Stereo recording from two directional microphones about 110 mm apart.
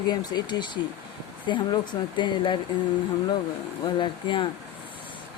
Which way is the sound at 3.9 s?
45° left (ahead or behind).